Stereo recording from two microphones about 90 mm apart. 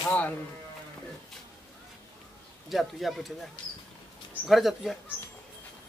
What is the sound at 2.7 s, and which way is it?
Speech, centre (ahead or behind).